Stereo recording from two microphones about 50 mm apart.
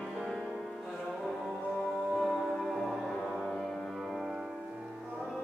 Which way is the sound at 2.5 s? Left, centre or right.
Centre.